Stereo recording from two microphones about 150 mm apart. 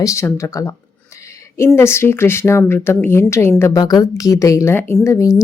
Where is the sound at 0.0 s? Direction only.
20° left (ahead or behind).